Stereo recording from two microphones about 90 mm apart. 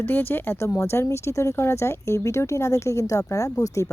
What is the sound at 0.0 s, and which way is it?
Speech, 25° left (ahead or behind).